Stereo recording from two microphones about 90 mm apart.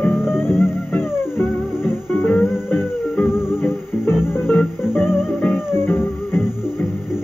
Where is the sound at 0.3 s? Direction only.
25° left (ahead or behind).